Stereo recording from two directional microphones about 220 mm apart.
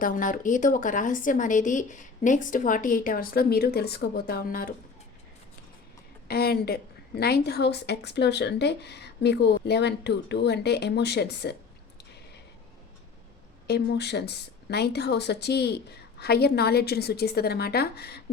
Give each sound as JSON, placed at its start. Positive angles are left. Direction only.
{"t": 0.0, "sound": "a woman's voice", "side_deg": 40}
{"t": 6.2, "sound": "speech", "side_deg": 45}
{"t": 13.7, "sound": "speech", "side_deg": 50}